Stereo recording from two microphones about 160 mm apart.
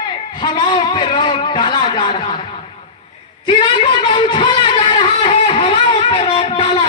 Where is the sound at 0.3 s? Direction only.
30° left (ahead or behind).